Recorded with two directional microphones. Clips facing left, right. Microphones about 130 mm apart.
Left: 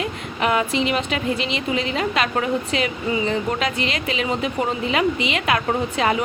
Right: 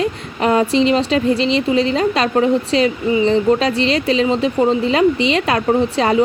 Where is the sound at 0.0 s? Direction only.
35° right (ahead or behind).